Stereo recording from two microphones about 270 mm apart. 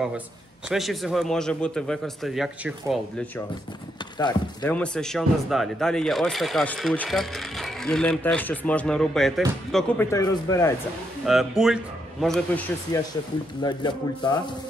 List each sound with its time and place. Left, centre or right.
0.7 s speech: centre
4.2 s speech: centre
4.7 s speech: centre
11.2 s speech: centre
13.6 s speech: centre